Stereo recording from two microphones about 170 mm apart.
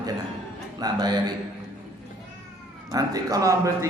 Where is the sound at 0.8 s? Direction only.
25° right (ahead or behind).